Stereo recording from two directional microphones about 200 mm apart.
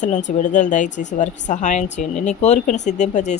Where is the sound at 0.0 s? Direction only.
35° left (ahead or behind).